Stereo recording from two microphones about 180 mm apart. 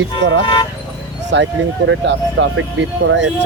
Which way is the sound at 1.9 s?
90° right.